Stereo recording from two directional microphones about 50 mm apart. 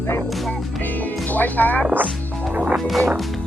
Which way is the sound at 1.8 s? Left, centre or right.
Right.